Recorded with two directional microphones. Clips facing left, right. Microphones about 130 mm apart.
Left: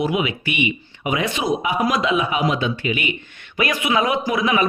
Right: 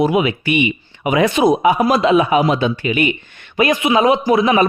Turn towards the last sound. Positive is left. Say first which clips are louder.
# right 6 dB
turn(degrees=-35)  # may be behind; listen again after turning